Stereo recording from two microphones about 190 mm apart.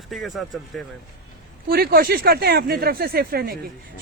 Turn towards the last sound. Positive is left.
turn(degrees=-55)  # may be behind; listen again after turning